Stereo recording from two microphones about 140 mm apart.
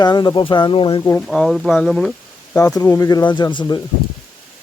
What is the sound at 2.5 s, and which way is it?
Speech, 25° left (ahead or behind).